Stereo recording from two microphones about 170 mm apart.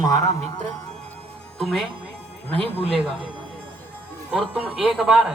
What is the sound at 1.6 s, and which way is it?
Speech, 5° left (ahead or behind).